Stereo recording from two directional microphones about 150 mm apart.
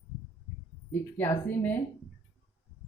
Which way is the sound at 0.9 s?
15° left (ahead or behind).